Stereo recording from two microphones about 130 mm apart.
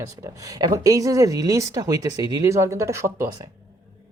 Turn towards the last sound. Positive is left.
turn(degrees=-20)  # may be behind; listen again after turning